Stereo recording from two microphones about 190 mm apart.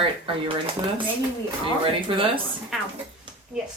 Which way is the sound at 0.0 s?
25° right (ahead or behind).